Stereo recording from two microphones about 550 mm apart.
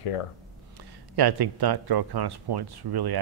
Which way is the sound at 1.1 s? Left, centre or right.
Right.